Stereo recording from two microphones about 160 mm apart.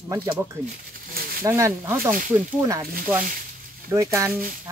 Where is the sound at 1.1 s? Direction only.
70° right (ahead or behind).